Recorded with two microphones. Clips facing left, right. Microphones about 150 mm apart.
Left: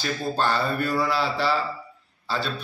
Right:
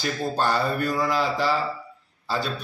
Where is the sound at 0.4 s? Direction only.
10° right (ahead or behind).